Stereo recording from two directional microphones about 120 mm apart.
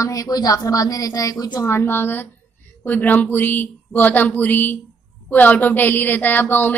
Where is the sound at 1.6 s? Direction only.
20° left (ahead or behind).